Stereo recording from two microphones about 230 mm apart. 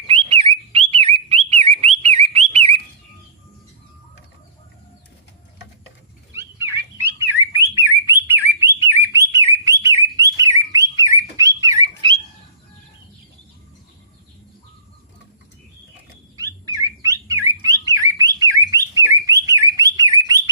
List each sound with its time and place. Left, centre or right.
0.1 s bird: right
6.3 s bird: centre
8.1 s bird: centre
16.4 s bird: centre